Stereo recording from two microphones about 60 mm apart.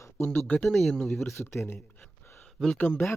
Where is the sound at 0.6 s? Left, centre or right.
Centre.